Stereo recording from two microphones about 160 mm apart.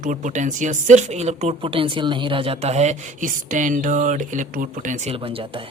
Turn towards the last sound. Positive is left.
turn(degrees=-50)  # may be behind; listen again after turning